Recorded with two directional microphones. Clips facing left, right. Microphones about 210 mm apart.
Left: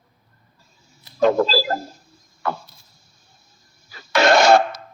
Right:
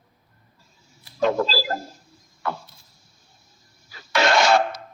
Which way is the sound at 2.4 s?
40° left (ahead or behind).